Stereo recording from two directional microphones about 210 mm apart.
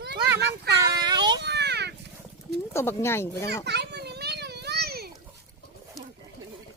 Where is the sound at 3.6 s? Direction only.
55° right (ahead or behind).